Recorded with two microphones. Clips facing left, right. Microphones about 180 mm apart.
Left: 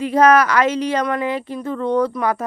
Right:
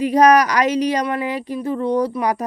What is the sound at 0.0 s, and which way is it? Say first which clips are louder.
Speech: right 1 dB; 15° right (ahead or behind).